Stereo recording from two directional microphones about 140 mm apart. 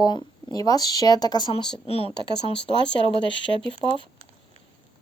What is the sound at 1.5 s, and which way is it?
Speech, 40° left (ahead or behind).